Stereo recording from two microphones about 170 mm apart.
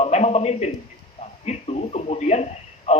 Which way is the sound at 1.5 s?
40° left (ahead or behind).